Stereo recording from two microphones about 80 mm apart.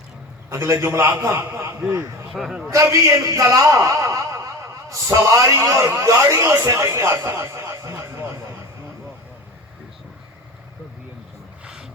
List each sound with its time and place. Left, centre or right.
0.5 s a man's voice: right
2.4 s a man's voice: centre
2.6 s a man's voice: right
11.6 s music: centre